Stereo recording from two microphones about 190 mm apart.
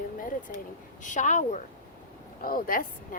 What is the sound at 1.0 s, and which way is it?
A woman's voice, 40° left (ahead or behind).